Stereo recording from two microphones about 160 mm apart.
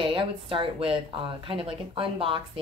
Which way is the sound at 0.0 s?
30° right (ahead or behind).